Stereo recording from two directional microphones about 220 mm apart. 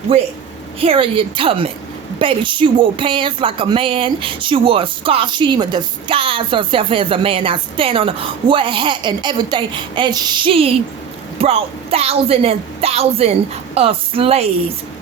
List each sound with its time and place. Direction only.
0.8 s a woman's voice: 25° right (ahead or behind)